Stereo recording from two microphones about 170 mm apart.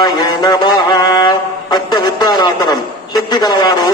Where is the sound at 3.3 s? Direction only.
25° left (ahead or behind).